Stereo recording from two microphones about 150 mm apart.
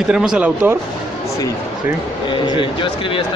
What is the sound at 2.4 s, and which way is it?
Speech, 35° left (ahead or behind).